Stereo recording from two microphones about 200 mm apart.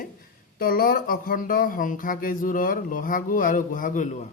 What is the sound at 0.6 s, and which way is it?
A man's voice, 45° left (ahead or behind).